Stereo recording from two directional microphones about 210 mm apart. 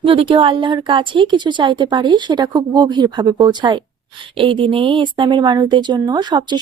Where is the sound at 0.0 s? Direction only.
25° right (ahead or behind).